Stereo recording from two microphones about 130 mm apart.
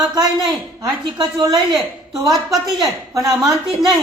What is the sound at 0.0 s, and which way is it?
A woman's voice, 30° right (ahead or behind).